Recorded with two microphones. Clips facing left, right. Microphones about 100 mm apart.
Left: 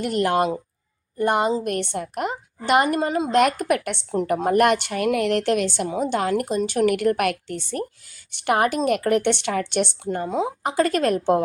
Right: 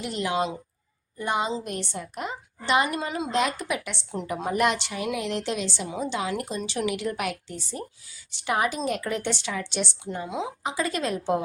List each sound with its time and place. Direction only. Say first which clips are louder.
0.0 s a woman's voice: left 6 dB; 55° left (ahead or behind)
3.4 s a woman's voice: left 7 dB; 55° left (ahead or behind)